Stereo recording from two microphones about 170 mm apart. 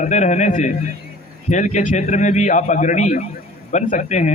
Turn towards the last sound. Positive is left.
turn(degrees=45)  # may be behind; listen again after turning